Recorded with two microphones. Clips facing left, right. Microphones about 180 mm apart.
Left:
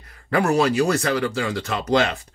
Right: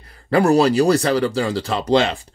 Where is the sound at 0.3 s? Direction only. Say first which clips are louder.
Right 5 dB; 35° right (ahead or behind).